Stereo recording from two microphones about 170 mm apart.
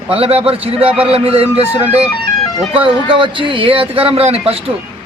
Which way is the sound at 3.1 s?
30° right (ahead or behind).